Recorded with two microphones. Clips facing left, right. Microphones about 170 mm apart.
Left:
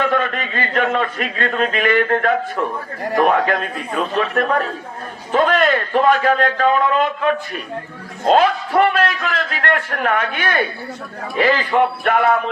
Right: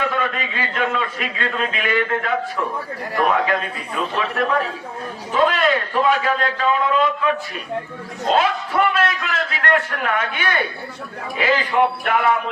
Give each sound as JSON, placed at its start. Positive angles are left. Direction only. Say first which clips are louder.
{"t": 0.1, "sound": "a man's voice", "louder": "left 4 dB", "side_deg": 50}